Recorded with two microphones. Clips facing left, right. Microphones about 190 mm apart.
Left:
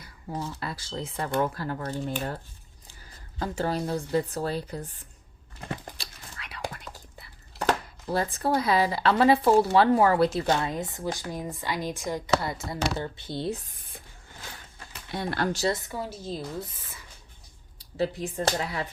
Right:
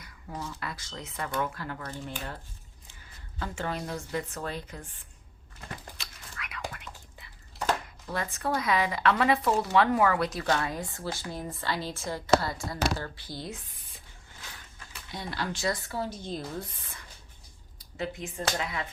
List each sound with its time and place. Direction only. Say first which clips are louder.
0.0 s speech: left 4 dB; 30° left (ahead or behind)
3.3 s speech: left 5 dB; 40° left (ahead or behind)
6.0 s whispering: even; 30° left (ahead or behind)
8.0 s speech: left 6 dB; 35° left (ahead or behind)
13.7 s a sound: left 6 dB; 50° left (ahead or behind)
15.1 s speech: left 6 dB; 60° left (ahead or behind)
15.7 s speech: left 1 dB; 15° left (ahead or behind)
17.7 s speech: left 7 dB; 35° left (ahead or behind)